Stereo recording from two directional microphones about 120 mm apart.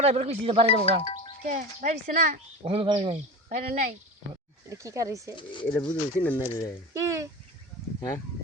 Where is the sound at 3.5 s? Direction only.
80° right.